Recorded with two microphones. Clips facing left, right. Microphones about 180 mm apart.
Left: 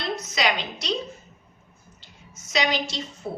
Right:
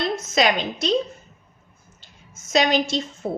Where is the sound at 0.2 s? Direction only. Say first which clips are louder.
Right 5 dB; 50° right (ahead or behind).